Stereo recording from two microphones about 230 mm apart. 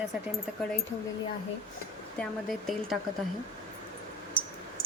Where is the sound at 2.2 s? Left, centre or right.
Centre.